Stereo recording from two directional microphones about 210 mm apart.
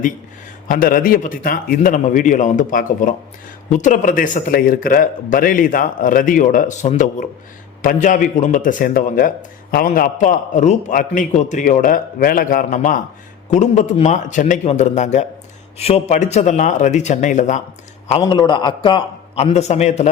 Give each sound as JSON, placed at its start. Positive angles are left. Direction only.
{"t": 0.7, "sound": "a man's voice", "side_deg": 45}
{"t": 18.2, "sound": "a man's voice", "side_deg": 20}